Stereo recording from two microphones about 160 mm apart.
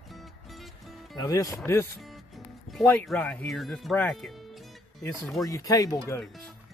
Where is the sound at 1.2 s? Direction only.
20° left (ahead or behind).